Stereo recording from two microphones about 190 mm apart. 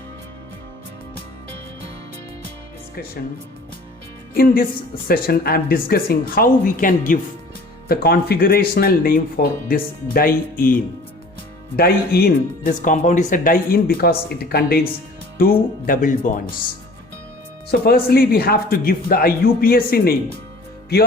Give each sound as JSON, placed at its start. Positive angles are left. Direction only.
{"t": 4.4, "sound": "speech", "side_deg": 50}
{"t": 11.8, "sound": "speech", "side_deg": 50}
{"t": 17.7, "sound": "speech", "side_deg": 55}
{"t": 20.9, "sound": "music", "side_deg": 55}